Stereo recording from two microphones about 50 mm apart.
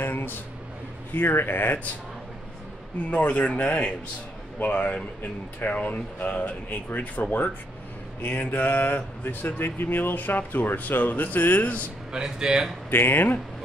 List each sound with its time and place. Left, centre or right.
0.0 s a sound: left
1.1 s speech: left
3.1 s speech: left
12.1 s speech: centre
12.9 s speech: left